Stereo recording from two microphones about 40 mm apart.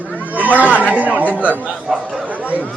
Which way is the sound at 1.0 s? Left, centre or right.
Right.